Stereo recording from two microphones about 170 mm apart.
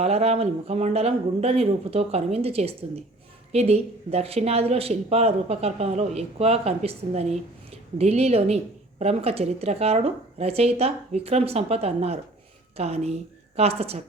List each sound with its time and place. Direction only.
0.0 s a woman's voice: 40° right (ahead or behind)